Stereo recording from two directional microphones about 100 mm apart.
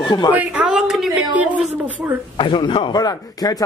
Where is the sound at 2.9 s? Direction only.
40° left (ahead or behind).